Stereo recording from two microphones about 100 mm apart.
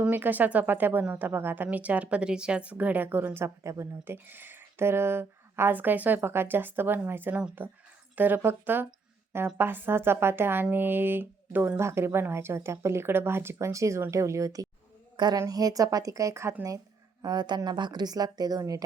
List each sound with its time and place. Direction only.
0.0 s speech: 20° right (ahead or behind); by 14.7 s 35° right (ahead or behind)
15.1 s a sound: 45° right (ahead or behind)
15.4 s a woman's voice: 40° right (ahead or behind)
17.2 s a woman's voice: 45° right (ahead or behind)